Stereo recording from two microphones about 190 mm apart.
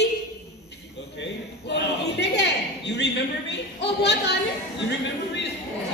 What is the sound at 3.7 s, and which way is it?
Speech, 65° left (ahead or behind).